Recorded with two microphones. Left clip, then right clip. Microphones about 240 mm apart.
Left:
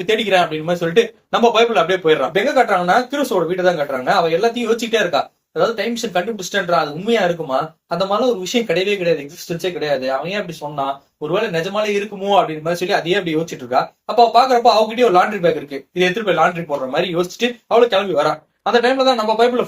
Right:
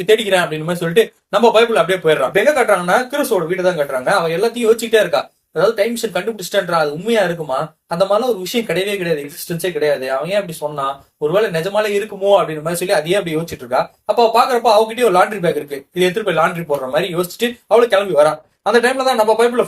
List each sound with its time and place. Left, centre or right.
0.0 s speech: right